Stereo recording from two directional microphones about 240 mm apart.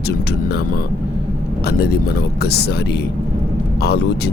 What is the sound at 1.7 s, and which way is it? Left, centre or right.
Speech, left.